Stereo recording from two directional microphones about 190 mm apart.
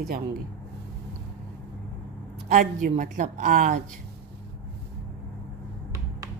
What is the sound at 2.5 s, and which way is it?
A woman's voice, 45° right (ahead or behind).